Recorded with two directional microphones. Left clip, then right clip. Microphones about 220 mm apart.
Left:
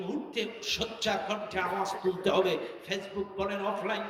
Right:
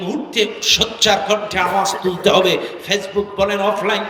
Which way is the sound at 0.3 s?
50° right (ahead or behind).